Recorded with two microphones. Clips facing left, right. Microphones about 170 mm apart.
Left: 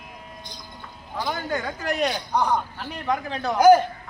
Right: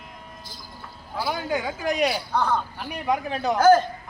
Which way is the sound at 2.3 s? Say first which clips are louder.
Left 1 dB; 15° left (ahead or behind).